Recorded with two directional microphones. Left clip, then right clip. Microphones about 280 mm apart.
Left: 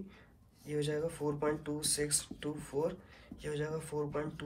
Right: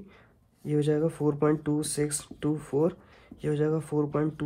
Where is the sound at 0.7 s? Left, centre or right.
Right.